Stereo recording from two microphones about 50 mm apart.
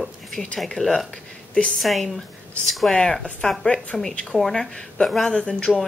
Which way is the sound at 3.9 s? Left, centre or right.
Centre.